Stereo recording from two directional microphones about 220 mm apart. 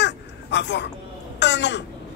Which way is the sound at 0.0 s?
55° left (ahead or behind).